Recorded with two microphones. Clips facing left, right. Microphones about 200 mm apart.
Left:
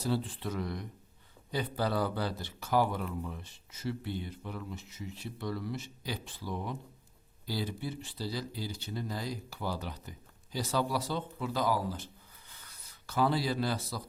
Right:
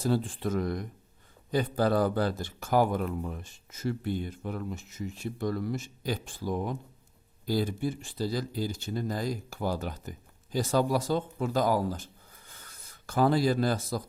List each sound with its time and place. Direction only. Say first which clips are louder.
0.0 s speech: right 5 dB; 45° right (ahead or behind)